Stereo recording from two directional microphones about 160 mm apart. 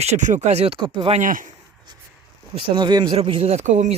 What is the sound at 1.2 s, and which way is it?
Speech, 55° right (ahead or behind).